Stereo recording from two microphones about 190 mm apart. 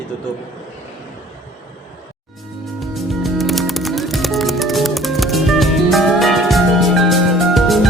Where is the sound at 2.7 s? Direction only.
Centre (ahead or behind).